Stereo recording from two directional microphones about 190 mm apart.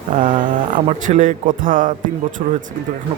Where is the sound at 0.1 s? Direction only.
45° right (ahead or behind).